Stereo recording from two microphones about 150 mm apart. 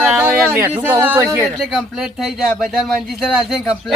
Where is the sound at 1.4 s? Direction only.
Centre (ahead or behind).